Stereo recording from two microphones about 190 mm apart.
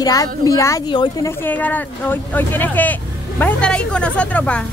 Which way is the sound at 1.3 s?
10° left (ahead or behind).